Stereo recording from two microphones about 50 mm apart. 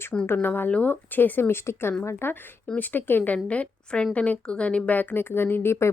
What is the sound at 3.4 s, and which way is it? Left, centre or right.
Speech, left.